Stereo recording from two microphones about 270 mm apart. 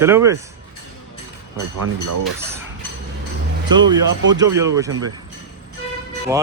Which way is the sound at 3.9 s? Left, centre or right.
Centre.